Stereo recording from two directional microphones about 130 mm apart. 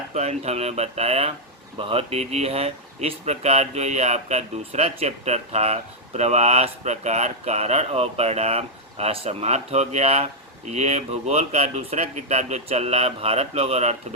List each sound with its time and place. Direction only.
0.1 s speech: 60° right (ahead or behind)